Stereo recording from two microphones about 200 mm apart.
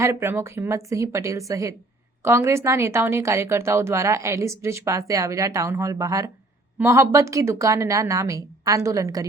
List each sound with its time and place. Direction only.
0.0 s speech: 15° right (ahead or behind)